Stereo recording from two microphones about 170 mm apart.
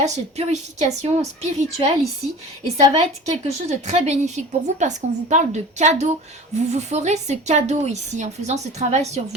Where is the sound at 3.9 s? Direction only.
45° right (ahead or behind).